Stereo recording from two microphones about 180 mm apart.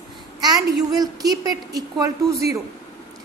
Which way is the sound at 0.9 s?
20° right (ahead or behind).